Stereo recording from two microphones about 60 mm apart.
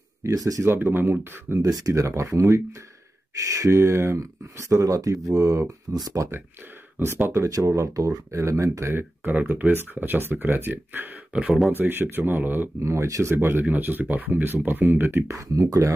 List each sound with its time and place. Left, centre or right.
0.2 s speech: right
1.6 s speech: right
7.0 s speech: right
7.3 s speech: right
12.8 s speech: right
15.3 s speech: right